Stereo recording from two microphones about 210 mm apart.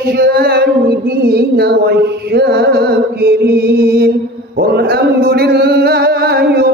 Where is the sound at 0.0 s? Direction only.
50° right (ahead or behind).